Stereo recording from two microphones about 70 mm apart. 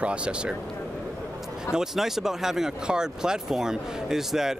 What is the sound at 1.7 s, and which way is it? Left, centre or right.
A man's voice, centre.